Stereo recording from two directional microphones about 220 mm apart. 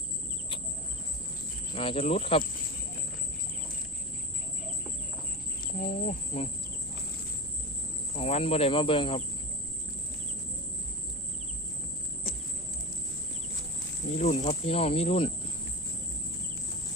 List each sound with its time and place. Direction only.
1.7 s speech: 25° left (ahead or behind)
5.8 s speech: 35° left (ahead or behind)
8.1 s speech: 30° left (ahead or behind)
14.2 s speech: 30° left (ahead or behind)